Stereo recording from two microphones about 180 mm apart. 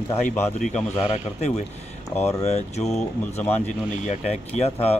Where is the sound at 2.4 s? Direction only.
40° left (ahead or behind).